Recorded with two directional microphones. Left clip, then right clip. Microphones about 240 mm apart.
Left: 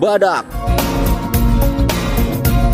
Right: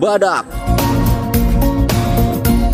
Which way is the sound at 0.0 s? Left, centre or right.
Centre.